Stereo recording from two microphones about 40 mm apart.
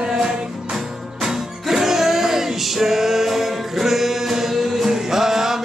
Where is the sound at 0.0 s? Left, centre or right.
Centre.